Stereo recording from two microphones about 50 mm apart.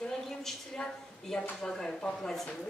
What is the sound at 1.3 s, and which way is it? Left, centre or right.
A woman's voice, centre.